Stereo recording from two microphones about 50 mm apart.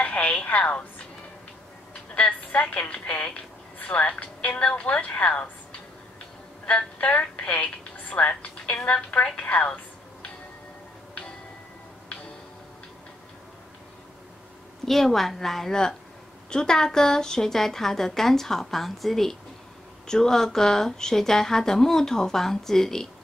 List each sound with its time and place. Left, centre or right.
0.0 s a sound: left
2.1 s a woman's voice: left
7.2 s a woman's voice: centre
14.9 s a woman's voice: centre